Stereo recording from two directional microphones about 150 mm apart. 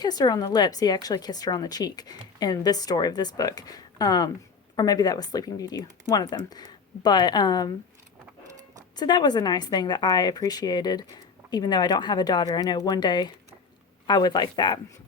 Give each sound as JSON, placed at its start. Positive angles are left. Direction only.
{"t": 0.0, "sound": "a woman's voice", "side_deg": 25}
{"t": 9.0, "sound": "a woman's voice", "side_deg": 25}